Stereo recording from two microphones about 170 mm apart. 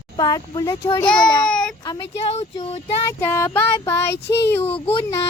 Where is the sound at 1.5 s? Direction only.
5° left (ahead or behind).